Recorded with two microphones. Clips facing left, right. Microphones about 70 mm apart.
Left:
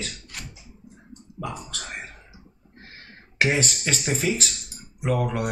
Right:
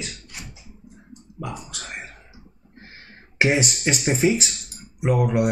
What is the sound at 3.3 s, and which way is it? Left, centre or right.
Speech, centre.